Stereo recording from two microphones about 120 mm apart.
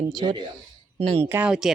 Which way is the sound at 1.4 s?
5° right (ahead or behind).